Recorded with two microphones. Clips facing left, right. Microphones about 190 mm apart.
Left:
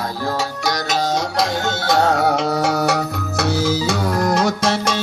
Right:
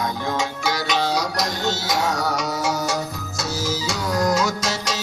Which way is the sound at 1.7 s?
60° left (ahead or behind).